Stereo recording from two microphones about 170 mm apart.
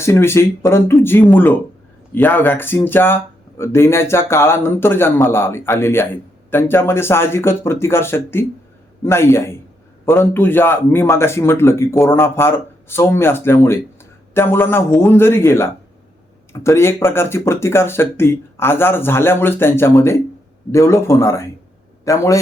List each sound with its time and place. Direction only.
0.0 s a man's voice: 15° left (ahead or behind)